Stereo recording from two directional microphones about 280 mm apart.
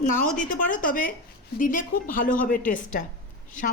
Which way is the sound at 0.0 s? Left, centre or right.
Left.